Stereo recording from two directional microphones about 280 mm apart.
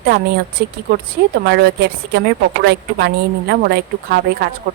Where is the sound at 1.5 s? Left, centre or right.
Right.